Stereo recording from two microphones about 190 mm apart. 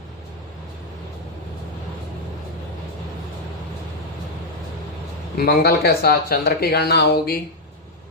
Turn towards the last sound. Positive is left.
turn(degrees=55)  # may be behind; listen again after turning